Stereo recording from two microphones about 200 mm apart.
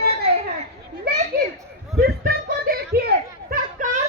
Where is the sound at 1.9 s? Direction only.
50° right (ahead or behind).